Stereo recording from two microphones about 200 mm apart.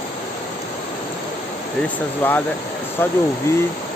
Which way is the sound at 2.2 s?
10° left (ahead or behind).